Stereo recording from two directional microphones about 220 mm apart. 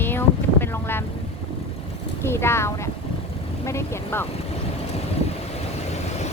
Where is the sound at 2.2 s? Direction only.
10° left (ahead or behind).